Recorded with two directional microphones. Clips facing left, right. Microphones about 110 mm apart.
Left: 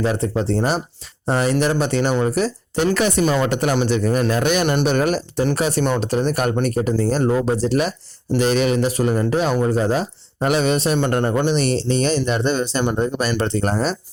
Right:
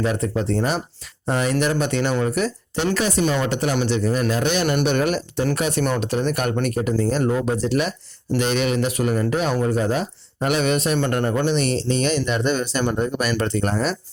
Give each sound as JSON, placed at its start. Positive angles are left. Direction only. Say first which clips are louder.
{"t": 0.0, "sound": "speech", "louder": "left 2 dB", "side_deg": 35}
{"t": 2.9, "sound": "a man's voice", "louder": "left 2 dB", "side_deg": 60}
{"t": 4.6, "sound": "speech", "louder": "left 2 dB", "side_deg": 30}
{"t": 11.4, "sound": "speech", "louder": "left 2 dB", "side_deg": 40}